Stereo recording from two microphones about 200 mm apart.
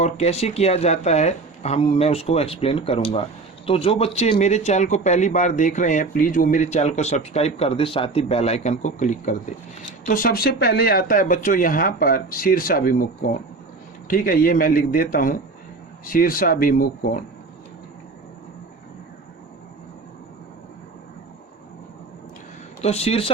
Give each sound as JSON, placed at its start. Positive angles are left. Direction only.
{"t": 0.0, "sound": "speech", "side_deg": 30}
{"t": 22.8, "sound": "speech", "side_deg": 30}